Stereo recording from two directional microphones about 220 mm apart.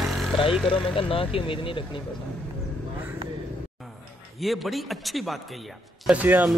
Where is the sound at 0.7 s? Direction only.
25° left (ahead or behind).